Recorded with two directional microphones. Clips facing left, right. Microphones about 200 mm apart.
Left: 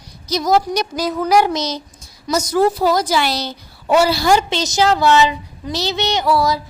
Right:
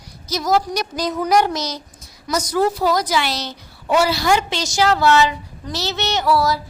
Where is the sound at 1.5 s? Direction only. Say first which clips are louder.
Left 4 dB; 25° left (ahead or behind).